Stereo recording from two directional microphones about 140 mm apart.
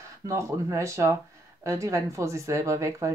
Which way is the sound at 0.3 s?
20° right (ahead or behind).